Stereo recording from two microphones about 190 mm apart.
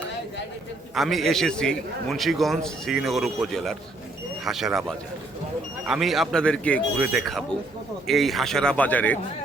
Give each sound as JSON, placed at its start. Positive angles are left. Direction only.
{"t": 0.9, "sound": "a man's voice", "side_deg": 0}